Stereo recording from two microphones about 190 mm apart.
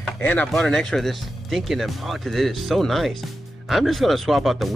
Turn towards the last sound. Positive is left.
turn(degrees=0)  # may be behind; listen again after turning